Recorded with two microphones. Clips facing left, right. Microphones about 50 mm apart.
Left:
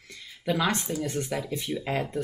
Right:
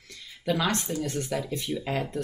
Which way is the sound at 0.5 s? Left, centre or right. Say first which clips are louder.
Even; centre.